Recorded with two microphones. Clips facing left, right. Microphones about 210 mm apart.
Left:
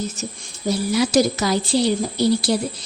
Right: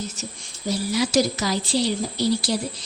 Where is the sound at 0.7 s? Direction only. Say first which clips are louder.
Left 4 dB; 55° left (ahead or behind).